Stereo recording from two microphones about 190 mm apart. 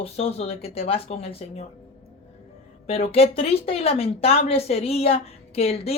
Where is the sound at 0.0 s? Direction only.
30° left (ahead or behind).